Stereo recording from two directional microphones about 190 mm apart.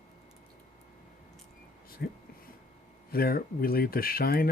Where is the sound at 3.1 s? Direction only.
50° left (ahead or behind).